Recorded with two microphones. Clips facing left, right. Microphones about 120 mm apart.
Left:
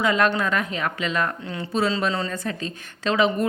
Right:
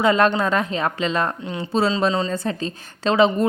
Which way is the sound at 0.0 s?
30° right (ahead or behind).